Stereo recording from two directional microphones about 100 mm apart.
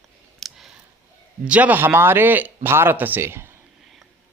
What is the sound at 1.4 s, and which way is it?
A man's voice, 15° right (ahead or behind).